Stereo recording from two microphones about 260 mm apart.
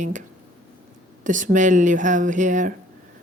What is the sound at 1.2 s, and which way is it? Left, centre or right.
Speech, right.